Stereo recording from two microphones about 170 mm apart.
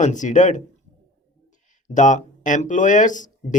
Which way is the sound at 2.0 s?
45° left (ahead or behind).